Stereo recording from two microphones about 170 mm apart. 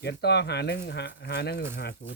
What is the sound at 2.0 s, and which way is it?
Speech, 55° left (ahead or behind).